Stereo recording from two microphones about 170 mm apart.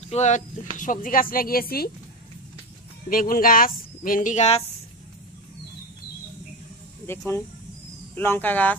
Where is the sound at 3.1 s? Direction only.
55° left (ahead or behind).